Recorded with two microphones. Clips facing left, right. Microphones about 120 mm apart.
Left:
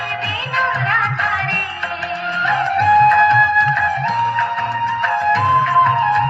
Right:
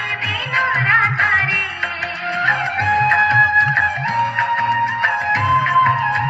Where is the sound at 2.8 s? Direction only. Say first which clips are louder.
Left 6 dB; 20° left (ahead or behind).